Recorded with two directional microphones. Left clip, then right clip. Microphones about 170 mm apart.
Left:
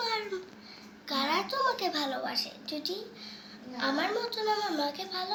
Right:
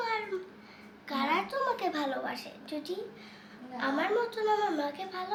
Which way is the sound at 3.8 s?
5° right (ahead or behind).